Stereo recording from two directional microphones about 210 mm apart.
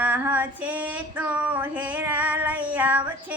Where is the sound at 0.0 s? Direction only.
5° right (ahead or behind).